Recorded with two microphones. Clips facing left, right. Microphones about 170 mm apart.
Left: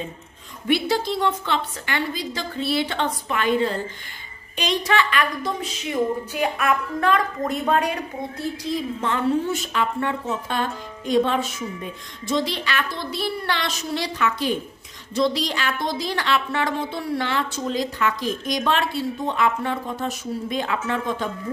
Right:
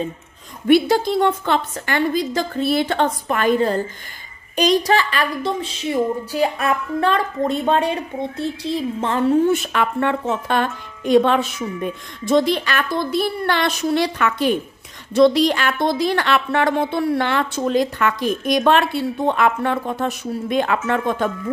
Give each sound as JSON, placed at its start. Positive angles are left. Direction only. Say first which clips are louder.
{"t": 0.7, "sound": "a woman's voice", "louder": "right 7 dB", "side_deg": -50}
{"t": 9.5, "sound": "a woman's voice", "louder": "right 5 dB", "side_deg": -60}